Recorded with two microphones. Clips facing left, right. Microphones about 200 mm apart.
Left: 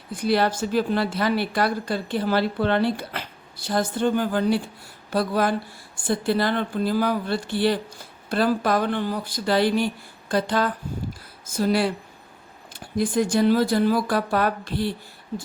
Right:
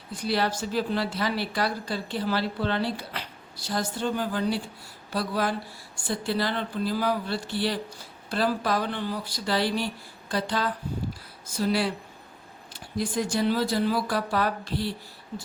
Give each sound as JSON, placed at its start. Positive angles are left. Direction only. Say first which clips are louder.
{"t": 0.1, "sound": "a woman's voice", "louder": "left 5 dB", "side_deg": 55}